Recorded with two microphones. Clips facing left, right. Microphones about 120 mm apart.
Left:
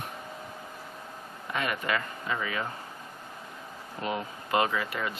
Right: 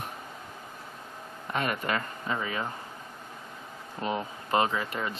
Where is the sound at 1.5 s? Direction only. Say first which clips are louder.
Right 1 dB; 40° right (ahead or behind).